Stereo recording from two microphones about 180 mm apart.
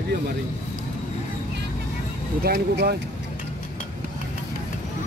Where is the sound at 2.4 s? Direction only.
65° right (ahead or behind).